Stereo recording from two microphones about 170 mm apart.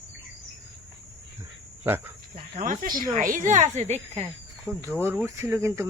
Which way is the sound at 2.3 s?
50° right (ahead or behind).